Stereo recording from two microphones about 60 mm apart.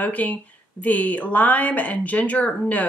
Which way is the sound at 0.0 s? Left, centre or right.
Left.